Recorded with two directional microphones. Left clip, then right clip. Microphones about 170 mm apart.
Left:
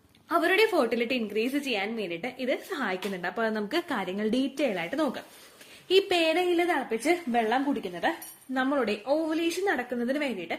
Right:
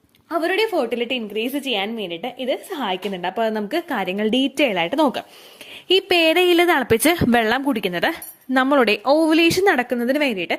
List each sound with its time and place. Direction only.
0.3 s a woman's voice: 20° right (ahead or behind); by 6.4 s 50° right (ahead or behind)
6.5 s speech: 70° right (ahead or behind)
8.5 s a woman's voice: 50° right (ahead or behind)